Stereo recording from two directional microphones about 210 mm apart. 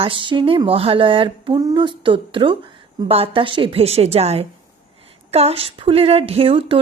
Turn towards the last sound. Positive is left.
turn(degrees=-25)  # may be behind; listen again after turning